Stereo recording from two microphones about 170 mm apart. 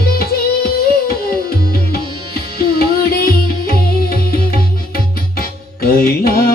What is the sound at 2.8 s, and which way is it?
Music, 60° left (ahead or behind).